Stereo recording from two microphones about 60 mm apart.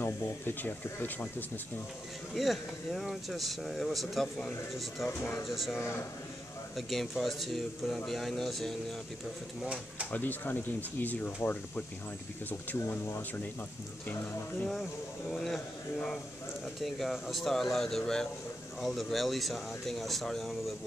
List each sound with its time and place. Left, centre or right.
0.0 s speech: left
2.3 s speech: centre
6.9 s speech: centre
9.6 s speech: centre
10.1 s speech: left
12.4 s speech: left
14.0 s speech: left
14.7 s speech: centre